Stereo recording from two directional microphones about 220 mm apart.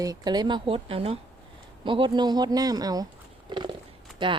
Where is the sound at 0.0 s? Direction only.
15° right (ahead or behind).